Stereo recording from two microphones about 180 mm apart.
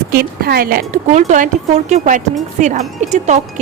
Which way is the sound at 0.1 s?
60° right (ahead or behind).